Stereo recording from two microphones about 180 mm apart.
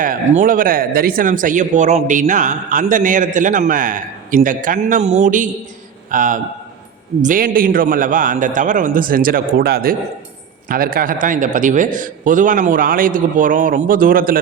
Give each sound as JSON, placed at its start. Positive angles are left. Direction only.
{"t": 0.0, "sound": "speech", "side_deg": -45}